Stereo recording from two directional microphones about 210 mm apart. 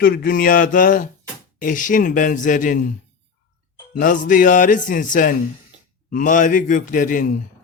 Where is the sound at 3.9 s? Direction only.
40° left (ahead or behind).